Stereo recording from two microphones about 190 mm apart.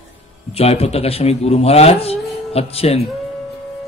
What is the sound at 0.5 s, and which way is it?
A man's voice, 30° left (ahead or behind).